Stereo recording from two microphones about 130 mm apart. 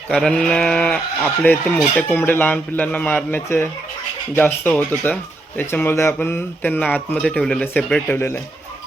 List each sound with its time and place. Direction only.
0.1 s speech: 5° left (ahead or behind)